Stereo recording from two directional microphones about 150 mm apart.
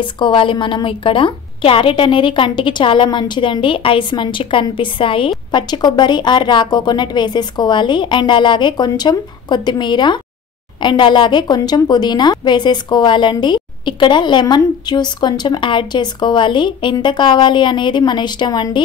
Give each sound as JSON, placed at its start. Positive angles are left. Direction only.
{"t": 0.0, "sound": "a woman's voice", "side_deg": 35}